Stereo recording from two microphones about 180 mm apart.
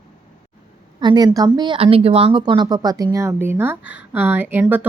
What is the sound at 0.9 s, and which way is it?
Speech, 25° right (ahead or behind).